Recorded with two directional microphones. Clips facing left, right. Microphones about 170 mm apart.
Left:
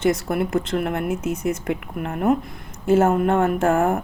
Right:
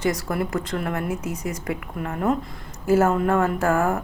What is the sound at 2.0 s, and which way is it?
Speech, 20° left (ahead or behind).